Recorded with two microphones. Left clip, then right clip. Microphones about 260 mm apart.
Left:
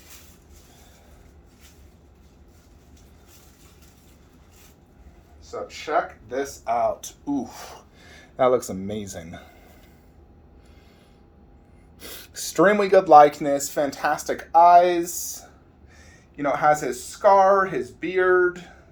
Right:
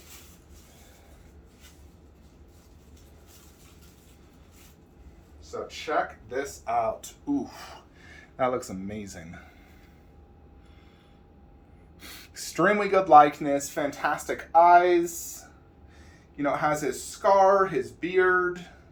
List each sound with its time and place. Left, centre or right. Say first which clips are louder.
5.6 s speech: left 4 dB; left
12.0 s speech: left 5 dB; left
16.4 s speech: left 6 dB; centre